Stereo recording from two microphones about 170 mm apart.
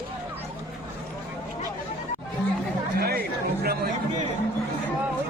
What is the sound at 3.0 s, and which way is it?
Chatter, 65° right (ahead or behind).